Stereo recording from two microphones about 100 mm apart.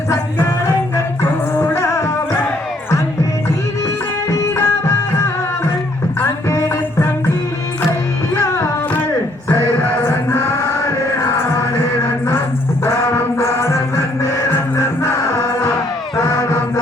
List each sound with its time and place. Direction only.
1.2 s music: 25° left (ahead or behind)
4.3 s music: 30° left (ahead or behind)
8.4 s music: 30° left (ahead or behind)
13.4 s music: 30° left (ahead or behind)